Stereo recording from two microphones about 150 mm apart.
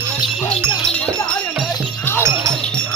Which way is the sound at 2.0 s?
15° left (ahead or behind).